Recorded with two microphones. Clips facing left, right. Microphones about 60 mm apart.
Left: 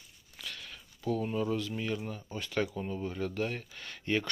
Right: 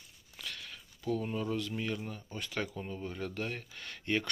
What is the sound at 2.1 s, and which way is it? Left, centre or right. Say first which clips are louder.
Speech: left 2 dB; centre.